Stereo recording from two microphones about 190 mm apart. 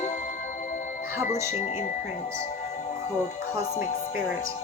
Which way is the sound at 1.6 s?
40° left (ahead or behind).